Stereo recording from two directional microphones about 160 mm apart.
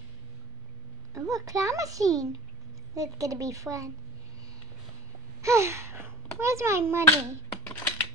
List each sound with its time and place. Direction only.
1.1 s a child's voice: 20° right (ahead or behind)
5.4 s a child's voice: 15° right (ahead or behind)
7.6 s typing: 15° left (ahead or behind)